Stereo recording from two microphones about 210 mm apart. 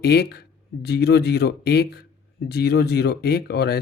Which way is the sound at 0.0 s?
50° left (ahead or behind).